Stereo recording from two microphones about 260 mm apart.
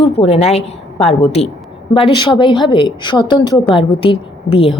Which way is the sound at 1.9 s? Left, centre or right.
Centre.